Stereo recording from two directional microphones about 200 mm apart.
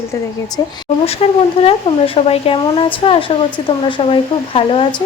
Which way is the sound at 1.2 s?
30° left (ahead or behind).